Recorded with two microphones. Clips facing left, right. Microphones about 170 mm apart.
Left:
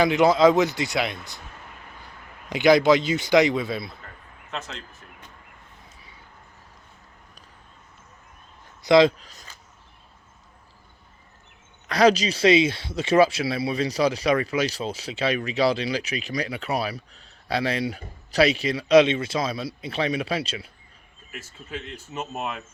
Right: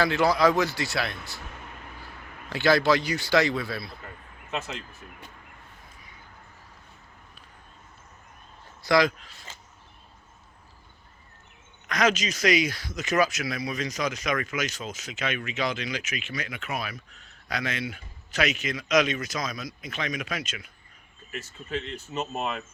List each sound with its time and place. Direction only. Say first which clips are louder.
0.0 s a man's voice: left 5 dB; 20° left (ahead or behind)
2.5 s a man's voice: left 5 dB; 20° left (ahead or behind)
4.5 s speech: right 2 dB; 10° right (ahead or behind)
8.8 s speech: left 6 dB; 25° left (ahead or behind)
9.1 s speech: left 1 dB; 40° left (ahead or behind)
11.9 s speech: left 6 dB; 35° left (ahead or behind)
21.2 s speech: right 3 dB; 5° left (ahead or behind)